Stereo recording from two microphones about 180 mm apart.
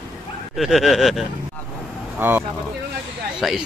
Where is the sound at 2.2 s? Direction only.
10° right (ahead or behind).